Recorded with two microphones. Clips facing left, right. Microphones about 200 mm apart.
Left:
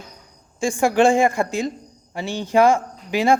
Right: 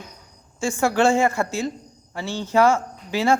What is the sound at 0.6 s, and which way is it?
Speech, 15° left (ahead or behind).